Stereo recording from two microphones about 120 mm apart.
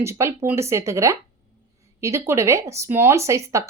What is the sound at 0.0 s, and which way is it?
Speech, 20° right (ahead or behind).